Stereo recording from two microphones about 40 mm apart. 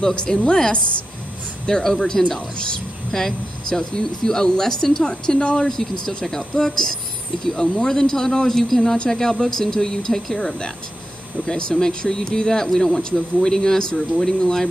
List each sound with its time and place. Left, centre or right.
0.0 s a woman's voice: centre